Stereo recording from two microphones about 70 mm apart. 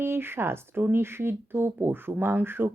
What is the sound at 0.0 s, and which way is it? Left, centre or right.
Speech, right.